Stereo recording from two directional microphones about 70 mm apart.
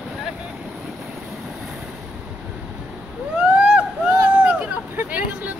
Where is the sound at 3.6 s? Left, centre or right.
Centre.